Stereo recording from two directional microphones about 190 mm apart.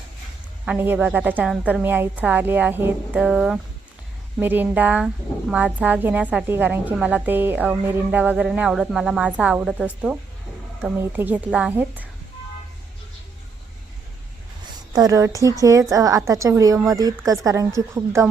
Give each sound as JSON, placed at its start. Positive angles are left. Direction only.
{"t": 0.6, "sound": "speech", "side_deg": -5}
{"t": 14.9, "sound": "speech", "side_deg": -20}